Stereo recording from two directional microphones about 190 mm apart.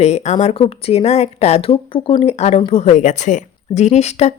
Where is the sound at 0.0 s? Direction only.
35° left (ahead or behind).